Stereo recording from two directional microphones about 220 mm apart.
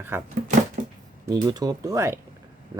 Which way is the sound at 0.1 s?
10° right (ahead or behind).